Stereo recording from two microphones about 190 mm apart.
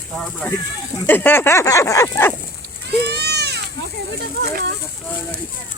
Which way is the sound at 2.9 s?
60° right (ahead or behind).